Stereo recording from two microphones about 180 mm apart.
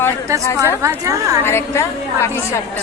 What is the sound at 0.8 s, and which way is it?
Speech, 20° right (ahead or behind).